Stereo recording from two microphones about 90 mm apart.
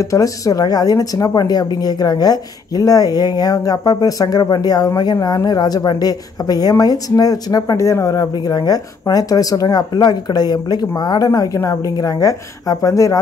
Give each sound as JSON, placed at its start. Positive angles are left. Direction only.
{"t": 0.0, "sound": "speech", "side_deg": 40}